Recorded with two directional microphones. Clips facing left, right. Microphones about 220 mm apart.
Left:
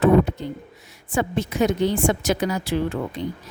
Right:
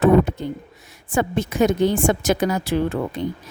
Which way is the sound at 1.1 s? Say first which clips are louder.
Right 2 dB; 50° right (ahead or behind).